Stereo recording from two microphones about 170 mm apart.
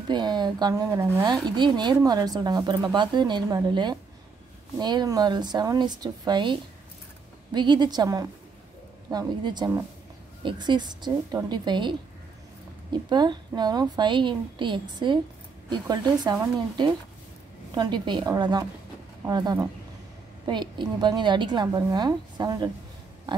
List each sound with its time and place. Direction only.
0.1 s speech: 25° right (ahead or behind)